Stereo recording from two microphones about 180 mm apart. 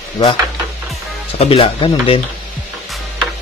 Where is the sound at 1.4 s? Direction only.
35° left (ahead or behind).